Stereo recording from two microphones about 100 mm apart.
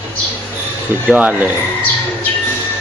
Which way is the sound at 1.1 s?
15° right (ahead or behind).